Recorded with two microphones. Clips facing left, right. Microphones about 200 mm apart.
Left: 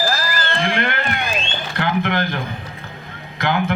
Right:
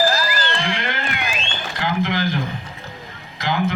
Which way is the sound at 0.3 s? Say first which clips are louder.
Left 3 dB; 55° left (ahead or behind).